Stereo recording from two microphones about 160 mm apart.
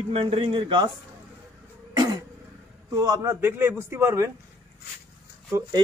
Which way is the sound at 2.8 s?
20° right (ahead or behind).